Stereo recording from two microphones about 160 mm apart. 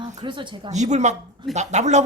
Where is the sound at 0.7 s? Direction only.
45° right (ahead or behind).